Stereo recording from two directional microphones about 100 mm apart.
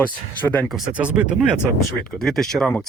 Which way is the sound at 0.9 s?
10° right (ahead or behind).